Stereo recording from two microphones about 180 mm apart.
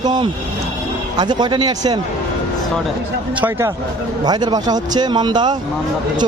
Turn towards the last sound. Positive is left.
turn(degrees=-25)  # may be behind; listen again after turning